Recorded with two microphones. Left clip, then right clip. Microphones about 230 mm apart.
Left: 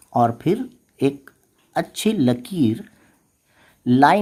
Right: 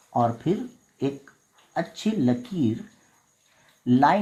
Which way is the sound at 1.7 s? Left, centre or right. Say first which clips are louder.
Left 6 dB; left.